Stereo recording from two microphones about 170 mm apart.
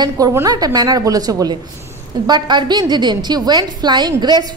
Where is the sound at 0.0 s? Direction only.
20° right (ahead or behind).